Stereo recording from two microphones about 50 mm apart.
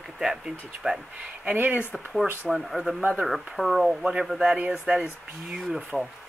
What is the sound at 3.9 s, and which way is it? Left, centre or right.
Speech, centre.